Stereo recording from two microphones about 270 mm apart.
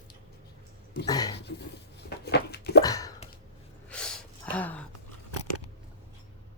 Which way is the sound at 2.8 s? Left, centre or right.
Centre.